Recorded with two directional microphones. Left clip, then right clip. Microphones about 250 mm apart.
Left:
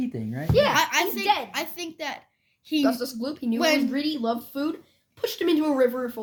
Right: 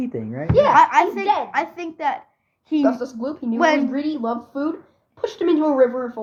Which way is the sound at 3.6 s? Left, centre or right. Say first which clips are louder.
Right 5 dB; left.